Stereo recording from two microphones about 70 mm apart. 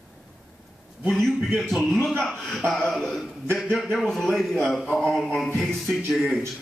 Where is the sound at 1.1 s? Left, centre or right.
Centre.